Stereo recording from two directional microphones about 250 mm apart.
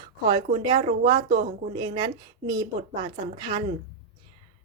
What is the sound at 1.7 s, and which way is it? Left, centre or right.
A woman's voice, centre.